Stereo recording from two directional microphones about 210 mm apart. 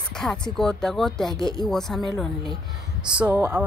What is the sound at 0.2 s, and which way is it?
Speech, centre (ahead or behind).